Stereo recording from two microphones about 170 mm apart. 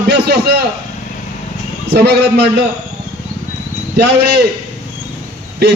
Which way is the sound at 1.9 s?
80° right.